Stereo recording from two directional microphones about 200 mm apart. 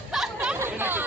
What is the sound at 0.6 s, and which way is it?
Chatter, 10° right (ahead or behind).